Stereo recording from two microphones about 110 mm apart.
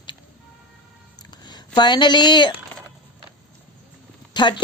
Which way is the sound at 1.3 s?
40° left (ahead or behind).